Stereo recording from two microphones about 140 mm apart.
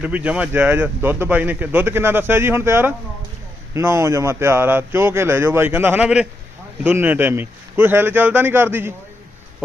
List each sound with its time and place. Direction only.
0.0 s a man's voice: 10° right (ahead or behind)